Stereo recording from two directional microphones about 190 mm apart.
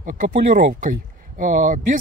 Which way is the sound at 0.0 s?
45° right (ahead or behind).